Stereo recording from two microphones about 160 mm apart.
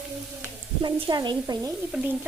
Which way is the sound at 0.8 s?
30° right (ahead or behind).